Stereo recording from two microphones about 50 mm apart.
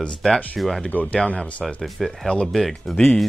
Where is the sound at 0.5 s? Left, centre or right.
Centre.